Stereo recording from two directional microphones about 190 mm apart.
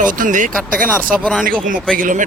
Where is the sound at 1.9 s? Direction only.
45° right (ahead or behind).